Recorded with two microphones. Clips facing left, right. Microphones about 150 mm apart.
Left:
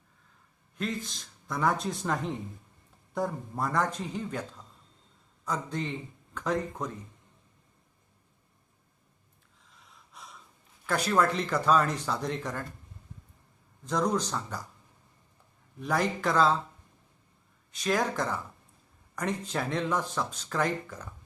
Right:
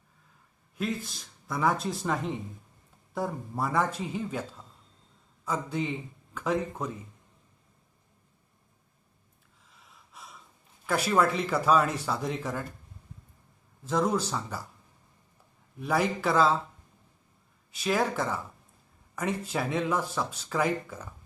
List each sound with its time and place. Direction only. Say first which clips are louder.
0.8 s speech: right 1 dB; 5° right (ahead or behind)
9.8 s gasp: even; centre (ahead or behind)
10.8 s speech: right 1 dB; 5° right (ahead or behind)
13.8 s speech: right 1 dB; 5° right (ahead or behind)
15.8 s speech: right 1 dB; 5° right (ahead or behind)
17.7 s speech: right 1 dB; 5° right (ahead or behind)